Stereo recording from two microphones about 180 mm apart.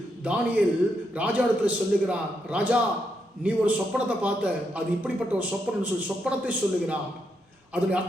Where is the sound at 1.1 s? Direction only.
10° right (ahead or behind).